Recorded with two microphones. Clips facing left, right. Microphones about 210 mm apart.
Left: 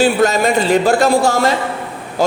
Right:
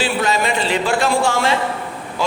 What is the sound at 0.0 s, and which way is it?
A man's voice, 45° left (ahead or behind).